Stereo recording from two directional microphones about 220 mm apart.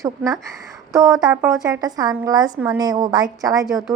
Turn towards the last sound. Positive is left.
turn(degrees=0)  # may be behind; listen again after turning